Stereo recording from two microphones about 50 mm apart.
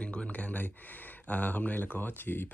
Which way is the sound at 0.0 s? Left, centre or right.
Left.